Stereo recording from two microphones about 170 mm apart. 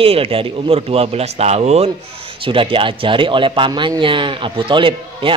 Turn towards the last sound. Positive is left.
turn(degrees=-30)  # may be behind; listen again after turning